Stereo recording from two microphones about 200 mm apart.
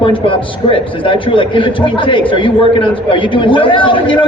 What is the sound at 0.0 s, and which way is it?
A man's voice, 25° left (ahead or behind).